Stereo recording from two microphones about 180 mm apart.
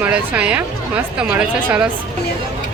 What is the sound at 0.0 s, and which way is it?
Speech, 10° right (ahead or behind).